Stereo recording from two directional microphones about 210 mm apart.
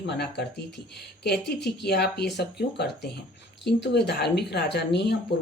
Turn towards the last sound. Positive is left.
turn(degrees=55)  # may be behind; listen again after turning